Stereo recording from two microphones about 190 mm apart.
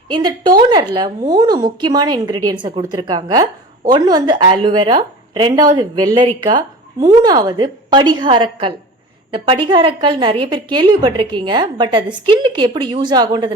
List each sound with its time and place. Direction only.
0.1 s a woman's voice: 25° right (ahead or behind)